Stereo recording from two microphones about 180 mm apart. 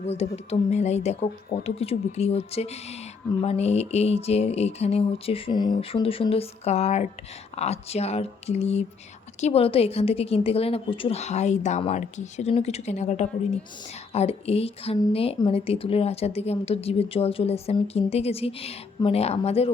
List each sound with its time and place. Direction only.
0.1 s a woman's voice: 35° left (ahead or behind)